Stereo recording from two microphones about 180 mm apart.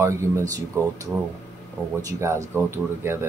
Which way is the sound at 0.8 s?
15° right (ahead or behind).